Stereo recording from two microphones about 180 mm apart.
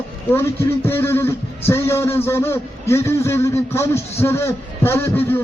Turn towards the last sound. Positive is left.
turn(degrees=15)  # may be behind; listen again after turning